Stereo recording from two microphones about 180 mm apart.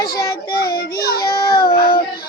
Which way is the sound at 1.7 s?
60° left (ahead or behind).